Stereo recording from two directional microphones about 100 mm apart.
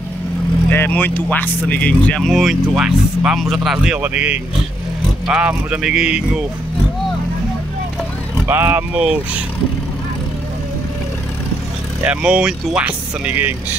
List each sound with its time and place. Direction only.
0.7 s speech: 20° left (ahead or behind)
2.2 s speech: centre (ahead or behind)
8.5 s speech: 25° right (ahead or behind)
8.9 s speech: 10° right (ahead or behind)
12.0 s speech: 10° right (ahead or behind)